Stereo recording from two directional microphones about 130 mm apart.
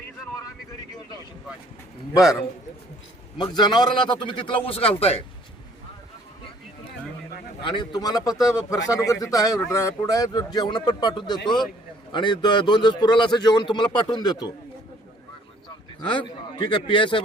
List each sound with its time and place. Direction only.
3.3 s speech: 35° left (ahead or behind); by 5.2 s 50° left (ahead or behind)
7.6 s speech: 35° left (ahead or behind)
16.0 s speech: 40° left (ahead or behind)